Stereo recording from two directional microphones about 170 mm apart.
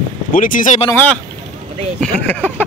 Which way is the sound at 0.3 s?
50° left (ahead or behind).